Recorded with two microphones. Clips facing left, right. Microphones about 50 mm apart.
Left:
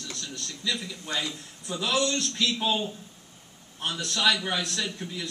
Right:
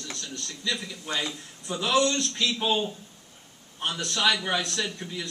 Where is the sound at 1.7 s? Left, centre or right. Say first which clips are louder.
Right 3 dB; centre.